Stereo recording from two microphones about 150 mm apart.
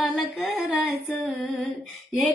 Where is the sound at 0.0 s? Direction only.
Centre (ahead or behind).